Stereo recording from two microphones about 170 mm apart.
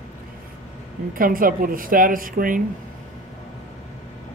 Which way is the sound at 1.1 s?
55° right (ahead or behind).